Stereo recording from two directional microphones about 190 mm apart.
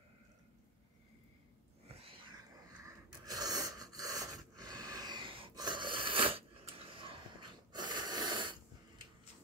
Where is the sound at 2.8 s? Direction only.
20° right (ahead or behind).